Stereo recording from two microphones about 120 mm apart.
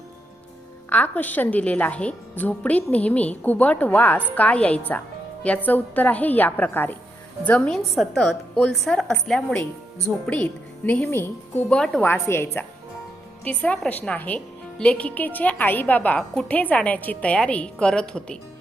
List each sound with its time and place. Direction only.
0.9 s a woman's voice: 15° left (ahead or behind)
4.9 s music: 10° left (ahead or behind)
5.6 s a woman's voice: 15° left (ahead or behind)
7.9 s a woman's voice: centre (ahead or behind); by 11.8 s 15° left (ahead or behind)
11.8 s a woman's voice: centre (ahead or behind)
12.0 s a woman's voice: 20° left (ahead or behind)